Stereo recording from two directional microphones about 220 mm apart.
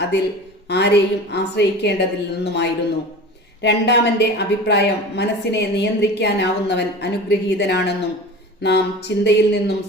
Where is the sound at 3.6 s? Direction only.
50° left (ahead or behind).